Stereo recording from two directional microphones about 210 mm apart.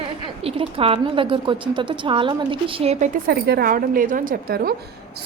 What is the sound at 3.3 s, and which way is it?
A woman's voice, 45° right (ahead or behind).